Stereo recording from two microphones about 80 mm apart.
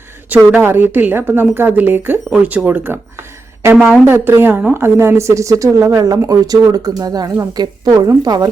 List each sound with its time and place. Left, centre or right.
0.6 s a woman's voice: right
6.0 s a woman's voice: right